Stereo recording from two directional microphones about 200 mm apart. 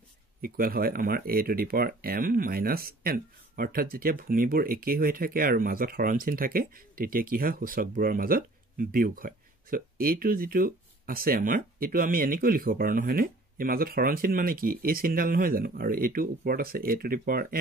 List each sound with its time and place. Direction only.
0.4 s speech: 45° right (ahead or behind)